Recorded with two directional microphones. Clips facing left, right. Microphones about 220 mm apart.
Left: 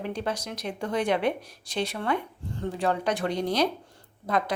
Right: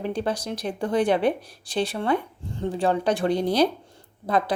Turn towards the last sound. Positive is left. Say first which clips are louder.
# right 3 dB
turn(degrees=-30)  # may be behind; listen again after turning